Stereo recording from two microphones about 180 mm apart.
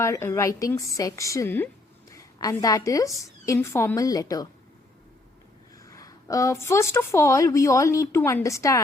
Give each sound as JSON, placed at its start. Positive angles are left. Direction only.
{"t": 0.0, "sound": "a woman's voice", "side_deg": 15}
{"t": 5.8, "sound": "a woman's voice", "side_deg": 20}